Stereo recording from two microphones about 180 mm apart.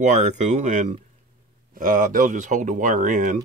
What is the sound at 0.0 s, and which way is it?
Speech, 40° right (ahead or behind).